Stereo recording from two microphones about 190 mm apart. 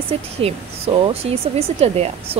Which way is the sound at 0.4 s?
30° right (ahead or behind).